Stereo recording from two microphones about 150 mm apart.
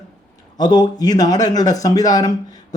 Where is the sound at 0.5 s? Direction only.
25° left (ahead or behind).